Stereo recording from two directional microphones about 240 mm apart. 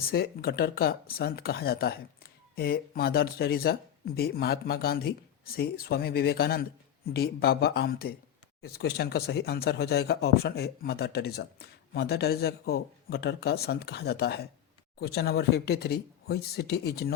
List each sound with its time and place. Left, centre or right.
0.0 s speech: left